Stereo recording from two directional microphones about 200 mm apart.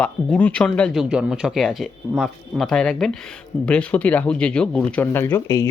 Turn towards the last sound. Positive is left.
turn(degrees=15)  # may be behind; listen again after turning